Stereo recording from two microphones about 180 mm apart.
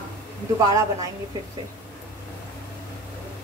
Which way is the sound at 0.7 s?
20° right (ahead or behind).